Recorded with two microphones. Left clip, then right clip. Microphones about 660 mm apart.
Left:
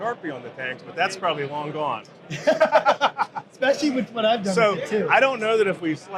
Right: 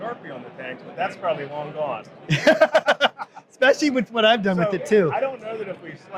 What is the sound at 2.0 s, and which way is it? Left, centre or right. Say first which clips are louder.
A man's voice: right 8 dB; right.